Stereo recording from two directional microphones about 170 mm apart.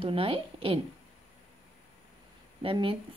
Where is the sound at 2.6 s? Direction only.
30° right (ahead or behind).